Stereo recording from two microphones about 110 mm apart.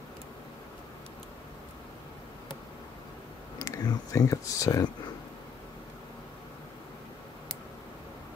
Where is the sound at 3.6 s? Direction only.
35° left (ahead or behind).